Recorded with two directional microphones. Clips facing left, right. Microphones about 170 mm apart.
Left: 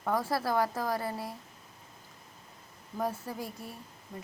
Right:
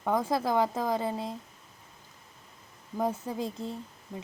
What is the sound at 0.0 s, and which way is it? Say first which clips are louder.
Speech: right 3 dB; 20° right (ahead or behind).